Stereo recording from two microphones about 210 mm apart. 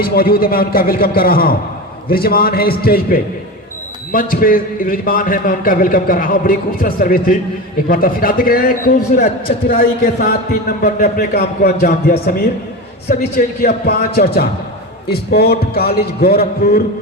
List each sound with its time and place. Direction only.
0.0 s a man's voice: 45° left (ahead or behind)